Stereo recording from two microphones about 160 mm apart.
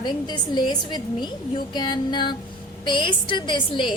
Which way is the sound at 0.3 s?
25° left (ahead or behind).